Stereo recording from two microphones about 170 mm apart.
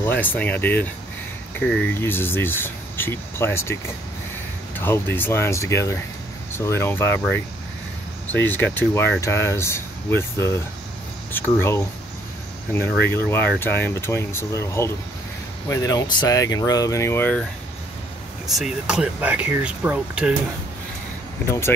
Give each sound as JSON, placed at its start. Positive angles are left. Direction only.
{"t": 0.0, "sound": "speech", "side_deg": 10}
{"t": 1.9, "sound": "speech", "side_deg": 15}
{"t": 4.7, "sound": "speech", "side_deg": 10}
{"t": 18.5, "sound": "speech", "side_deg": 0}